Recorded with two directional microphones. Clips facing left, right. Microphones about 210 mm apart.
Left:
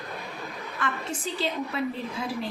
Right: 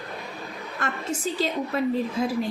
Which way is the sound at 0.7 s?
45° right (ahead or behind).